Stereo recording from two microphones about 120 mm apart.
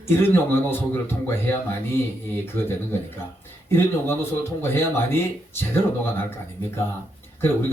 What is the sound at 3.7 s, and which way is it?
Speech, 20° left (ahead or behind).